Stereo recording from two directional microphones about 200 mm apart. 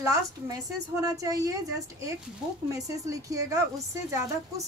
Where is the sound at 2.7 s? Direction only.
15° right (ahead or behind).